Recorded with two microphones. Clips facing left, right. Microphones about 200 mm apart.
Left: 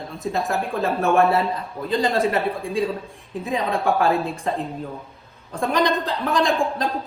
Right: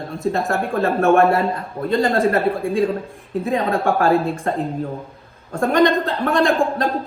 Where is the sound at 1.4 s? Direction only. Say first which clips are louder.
Right 4 dB; 50° right (ahead or behind).